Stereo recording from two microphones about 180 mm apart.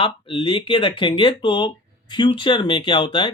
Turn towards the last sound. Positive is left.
turn(degrees=25)  # may be behind; listen again after turning